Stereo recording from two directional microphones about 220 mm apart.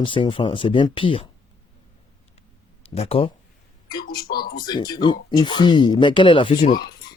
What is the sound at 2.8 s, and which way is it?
Speech, 25° left (ahead or behind).